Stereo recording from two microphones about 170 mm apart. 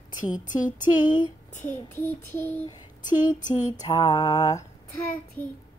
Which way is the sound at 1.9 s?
15° left (ahead or behind).